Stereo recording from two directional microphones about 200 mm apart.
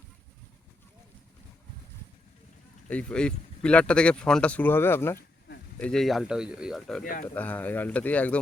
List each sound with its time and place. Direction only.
2.9 s speech: 5° left (ahead or behind)
7.0 s speech: 45° left (ahead or behind)
7.3 s speech: 10° left (ahead or behind)